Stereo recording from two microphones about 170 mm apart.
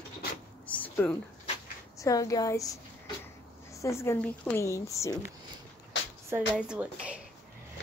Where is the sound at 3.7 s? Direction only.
15° left (ahead or behind).